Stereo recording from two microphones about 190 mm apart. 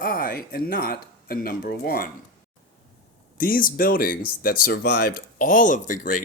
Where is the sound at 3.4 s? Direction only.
50° left (ahead or behind).